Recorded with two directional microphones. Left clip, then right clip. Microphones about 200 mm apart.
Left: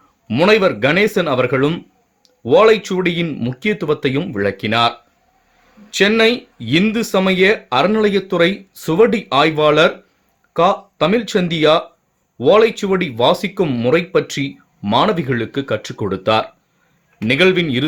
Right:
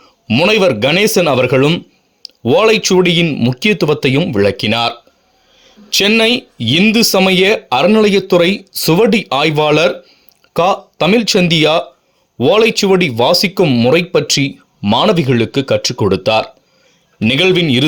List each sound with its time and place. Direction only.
0.3 s speech: 35° right (ahead or behind)